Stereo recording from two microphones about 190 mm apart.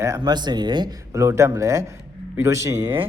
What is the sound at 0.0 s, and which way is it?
Speech, 20° right (ahead or behind).